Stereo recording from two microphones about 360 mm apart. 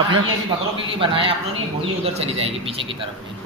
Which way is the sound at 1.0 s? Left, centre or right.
Centre.